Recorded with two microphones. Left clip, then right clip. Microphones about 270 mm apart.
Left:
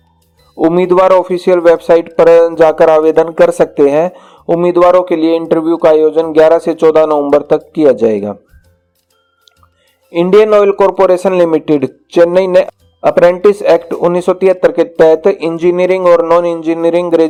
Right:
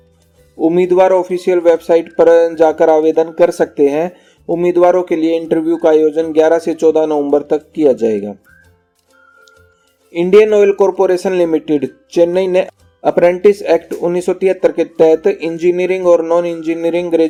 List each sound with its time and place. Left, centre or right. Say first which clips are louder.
0.6 s speech: left 2 dB; centre
4.8 s a man's voice: left 3 dB; left
5.0 s speech: left 3 dB; centre
10.1 s speech: left 2 dB; centre